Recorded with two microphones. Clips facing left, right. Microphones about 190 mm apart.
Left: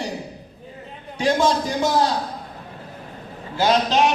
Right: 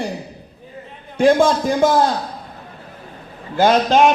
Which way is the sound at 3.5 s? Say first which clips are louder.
Right 5 dB; 50° right (ahead or behind).